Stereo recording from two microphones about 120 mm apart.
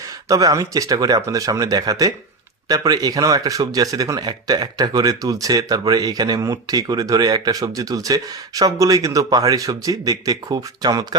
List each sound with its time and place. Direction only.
0.3 s speech: 30° right (ahead or behind)